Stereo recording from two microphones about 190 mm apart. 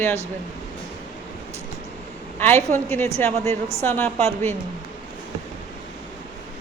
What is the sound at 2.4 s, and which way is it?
A woman's voice, 10° left (ahead or behind).